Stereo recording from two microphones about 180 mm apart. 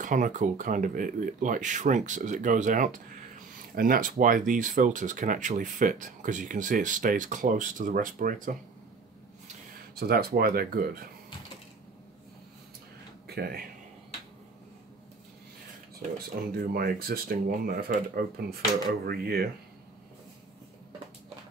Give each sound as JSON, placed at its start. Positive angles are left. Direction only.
{"t": 0.0, "sound": "speech", "side_deg": -45}
{"t": 9.9, "sound": "speech", "side_deg": -60}
{"t": 13.3, "sound": "speech", "side_deg": -60}
{"t": 16.0, "sound": "speech", "side_deg": -45}